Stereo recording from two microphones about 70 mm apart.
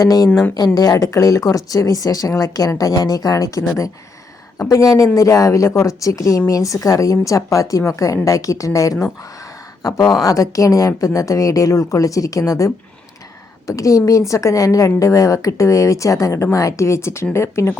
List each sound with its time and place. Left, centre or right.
0.0 s speech: left
4.7 s a woman's voice: left